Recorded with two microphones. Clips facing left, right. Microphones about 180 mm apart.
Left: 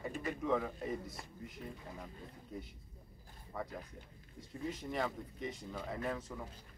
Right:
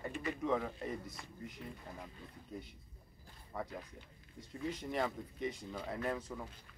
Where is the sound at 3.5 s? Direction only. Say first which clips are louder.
Even; centre (ahead or behind).